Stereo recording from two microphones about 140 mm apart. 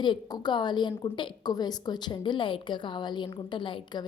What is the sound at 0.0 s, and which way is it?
A woman's voice, 35° left (ahead or behind).